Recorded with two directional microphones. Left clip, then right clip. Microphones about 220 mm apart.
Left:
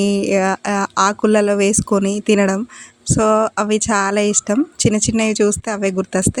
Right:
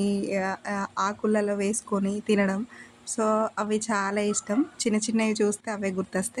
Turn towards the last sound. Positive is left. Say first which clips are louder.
# left 11 dB
turn(degrees=35)  # may be behind; listen again after turning